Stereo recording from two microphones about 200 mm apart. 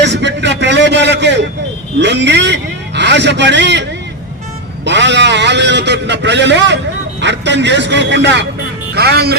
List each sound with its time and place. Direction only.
0.0 s a sound: 60° right (ahead or behind)
2.0 s a man's voice: 60° right (ahead or behind)
4.9 s a man's voice: 60° right (ahead or behind)